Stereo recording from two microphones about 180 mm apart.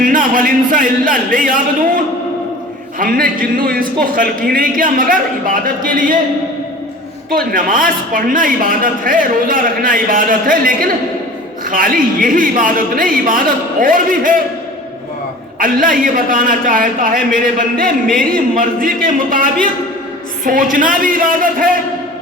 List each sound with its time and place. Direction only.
0.0 s a man's voice: 50° right (ahead or behind)
3.0 s a man's voice: 50° right (ahead or behind)
7.3 s a man's voice: 55° right (ahead or behind)
15.5 s a man's voice: 50° right (ahead or behind)